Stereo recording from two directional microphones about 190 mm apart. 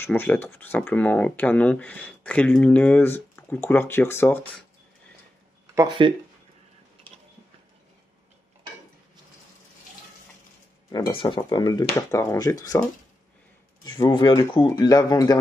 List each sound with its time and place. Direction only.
0.0 s speech: 10° left (ahead or behind)
5.8 s speech: 25° right (ahead or behind)
10.9 s speech: 25° left (ahead or behind)